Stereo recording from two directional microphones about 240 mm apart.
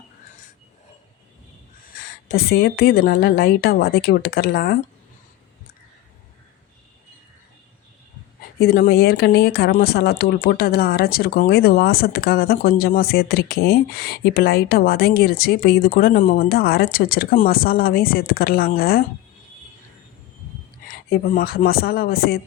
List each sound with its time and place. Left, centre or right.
2.0 s speech: left
8.5 s speech: left
20.8 s speech: left